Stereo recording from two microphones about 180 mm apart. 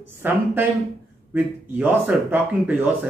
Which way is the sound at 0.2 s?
10° right (ahead or behind).